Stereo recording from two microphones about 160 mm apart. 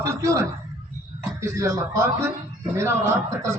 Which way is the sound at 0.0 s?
20° right (ahead or behind).